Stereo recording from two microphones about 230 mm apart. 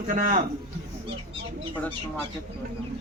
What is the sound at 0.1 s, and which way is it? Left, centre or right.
Speech, right.